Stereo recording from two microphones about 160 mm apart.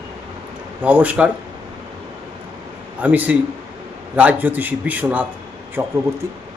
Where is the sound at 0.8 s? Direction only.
10° right (ahead or behind).